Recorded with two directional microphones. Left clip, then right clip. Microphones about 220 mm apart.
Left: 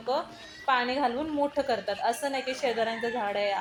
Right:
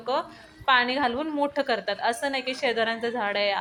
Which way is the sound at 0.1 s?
15° right (ahead or behind).